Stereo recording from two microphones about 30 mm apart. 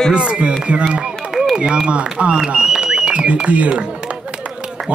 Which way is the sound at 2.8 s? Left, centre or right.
Right.